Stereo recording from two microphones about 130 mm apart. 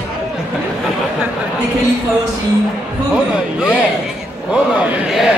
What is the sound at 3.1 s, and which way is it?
A man's voice, 10° right (ahead or behind).